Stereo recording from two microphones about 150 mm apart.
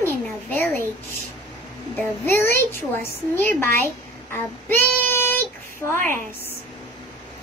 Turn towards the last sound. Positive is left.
turn(degrees=15)  # may be behind; listen again after turning